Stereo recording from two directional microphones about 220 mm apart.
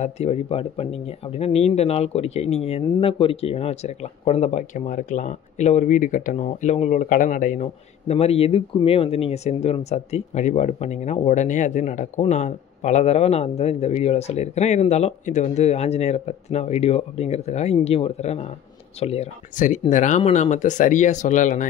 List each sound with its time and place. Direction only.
0.0 s speech: 30° left (ahead or behind)